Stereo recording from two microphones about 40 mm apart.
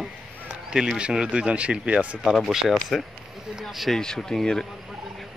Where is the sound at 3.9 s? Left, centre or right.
Centre.